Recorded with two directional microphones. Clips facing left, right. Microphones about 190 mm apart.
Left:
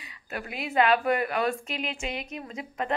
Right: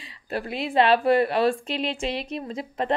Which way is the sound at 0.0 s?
30° right (ahead or behind).